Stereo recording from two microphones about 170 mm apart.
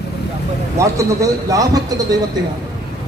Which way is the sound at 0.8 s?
20° right (ahead or behind).